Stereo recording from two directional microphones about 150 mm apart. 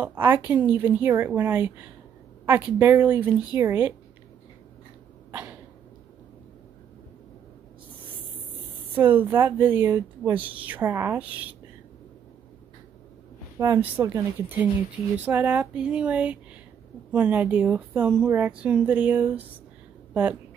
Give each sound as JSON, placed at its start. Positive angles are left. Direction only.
{"t": 0.0, "sound": "a woman's voice", "side_deg": -15}
{"t": 5.3, "sound": "cough", "side_deg": -10}
{"t": 8.9, "sound": "a woman's voice", "side_deg": -10}
{"t": 13.6, "sound": "a woman's voice", "side_deg": -10}